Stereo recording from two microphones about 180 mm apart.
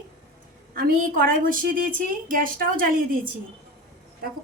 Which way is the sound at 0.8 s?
55° right (ahead or behind).